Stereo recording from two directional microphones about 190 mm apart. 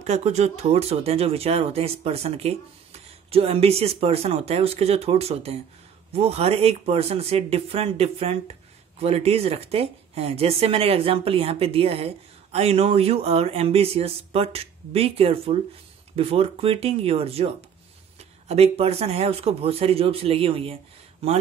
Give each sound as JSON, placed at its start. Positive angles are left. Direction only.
{"t": 0.0, "sound": "a woman's voice", "side_deg": -35}
{"t": 18.5, "sound": "a woman's voice", "side_deg": -35}